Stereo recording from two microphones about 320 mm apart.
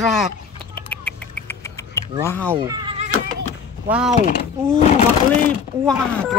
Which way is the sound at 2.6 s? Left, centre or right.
Centre.